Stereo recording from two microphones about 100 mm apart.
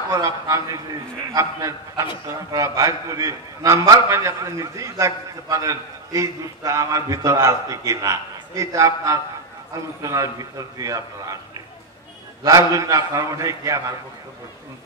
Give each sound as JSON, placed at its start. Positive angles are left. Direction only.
{"t": 0.1, "sound": "a man's voice", "side_deg": -35}
{"t": 12.4, "sound": "a man's voice", "side_deg": -35}